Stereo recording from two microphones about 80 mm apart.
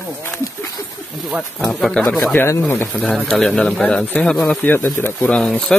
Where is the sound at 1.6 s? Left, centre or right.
Centre.